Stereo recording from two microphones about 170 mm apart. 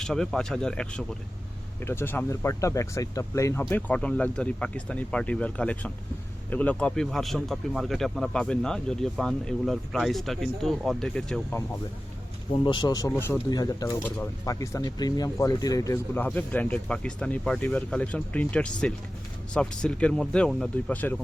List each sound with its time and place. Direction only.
0.0 s speech: 5° left (ahead or behind)
12.6 s speech: 25° left (ahead or behind); by 21.2 s 10° left (ahead or behind)